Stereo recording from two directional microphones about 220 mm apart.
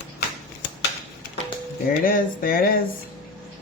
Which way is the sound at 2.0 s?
40° left (ahead or behind).